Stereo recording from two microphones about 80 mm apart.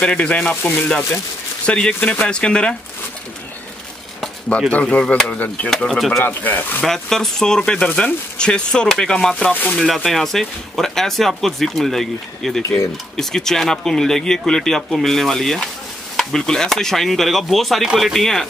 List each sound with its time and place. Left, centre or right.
0.0 s speech: centre
4.5 s speech: centre
5.3 s speech: centre
5.9 s speech: centre
6.2 s speech: left
6.8 s speech: centre
12.6 s speech: left
13.1 s speech: centre